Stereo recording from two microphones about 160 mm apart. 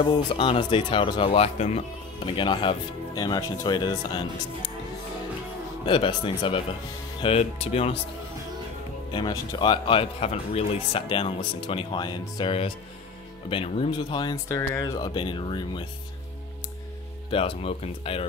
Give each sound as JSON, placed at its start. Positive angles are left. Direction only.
{"t": 0.0, "sound": "speech", "side_deg": 30}
{"t": 5.9, "sound": "speech", "side_deg": 30}
{"t": 9.1, "sound": "speech", "side_deg": 25}
{"t": 17.3, "sound": "speech", "side_deg": 35}